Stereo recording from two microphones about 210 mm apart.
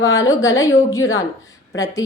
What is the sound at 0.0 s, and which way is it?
Speech, 15° left (ahead or behind).